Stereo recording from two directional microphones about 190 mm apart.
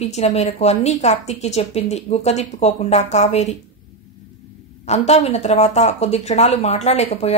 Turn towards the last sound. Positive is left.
turn(degrees=35)  # may be behind; listen again after turning